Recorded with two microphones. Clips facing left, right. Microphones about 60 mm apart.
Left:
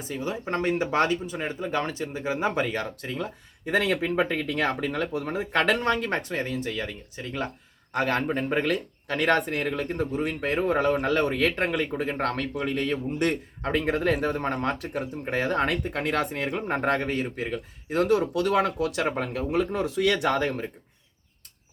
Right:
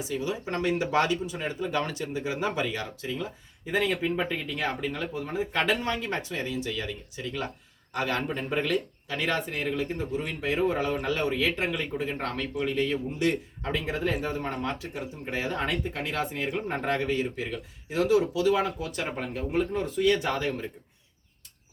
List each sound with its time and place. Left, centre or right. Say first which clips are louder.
0.0 s speech: even; left
2.6 s speech: left 2 dB; left
3.7 s speech: left 2 dB; left
8.6 s speech: left 1 dB; left